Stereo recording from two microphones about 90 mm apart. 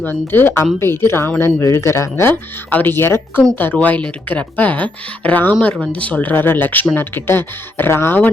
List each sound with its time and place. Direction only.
0.0 s speech: 20° left (ahead or behind)
2.3 s speech: 20° left (ahead or behind)